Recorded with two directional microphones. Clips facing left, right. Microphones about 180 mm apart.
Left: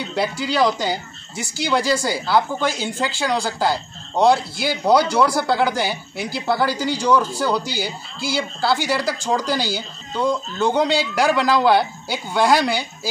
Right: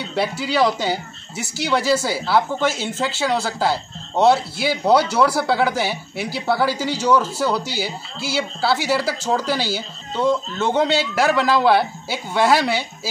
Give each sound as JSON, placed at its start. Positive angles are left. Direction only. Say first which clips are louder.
{"t": 0.1, "sound": "speech", "louder": "right 1 dB", "side_deg": -5}